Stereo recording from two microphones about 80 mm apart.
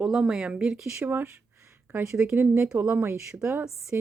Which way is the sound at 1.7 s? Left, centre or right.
Right.